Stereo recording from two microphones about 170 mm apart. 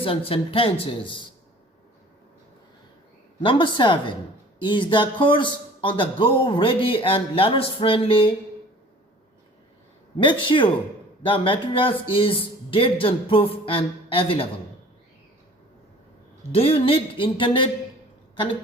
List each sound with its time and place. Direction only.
0.0 s speech: 35° left (ahead or behind)
3.4 s a man's voice: 30° left (ahead or behind)
10.2 s a man's voice: 30° left (ahead or behind)
16.5 s speech: 35° left (ahead or behind)